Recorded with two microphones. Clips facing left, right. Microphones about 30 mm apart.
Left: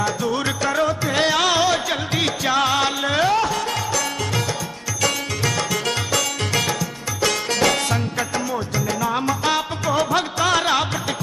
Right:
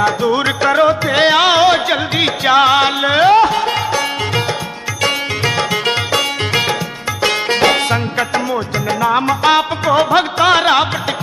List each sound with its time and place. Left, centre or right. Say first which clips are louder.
0.0 s music: right 8 dB; right
5.0 s music: right 6 dB; right